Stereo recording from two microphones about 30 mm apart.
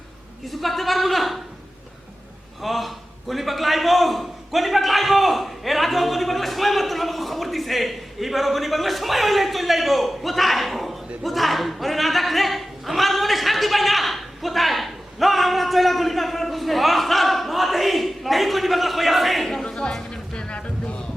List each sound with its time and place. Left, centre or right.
0.4 s a sound: centre
2.6 s a man's voice: centre
19.6 s music: left